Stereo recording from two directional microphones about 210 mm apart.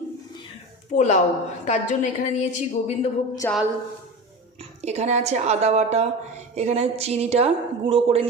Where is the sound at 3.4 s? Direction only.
10° left (ahead or behind).